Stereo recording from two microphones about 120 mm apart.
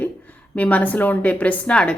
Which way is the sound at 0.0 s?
15° left (ahead or behind).